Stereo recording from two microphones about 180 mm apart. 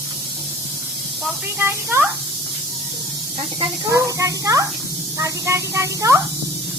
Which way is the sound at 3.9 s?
15° right (ahead or behind).